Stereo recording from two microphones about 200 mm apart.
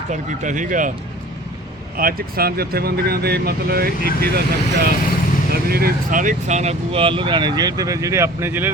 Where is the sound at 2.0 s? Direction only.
45° right (ahead or behind).